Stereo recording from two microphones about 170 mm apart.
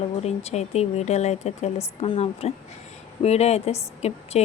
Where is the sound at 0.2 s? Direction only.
40° left (ahead or behind).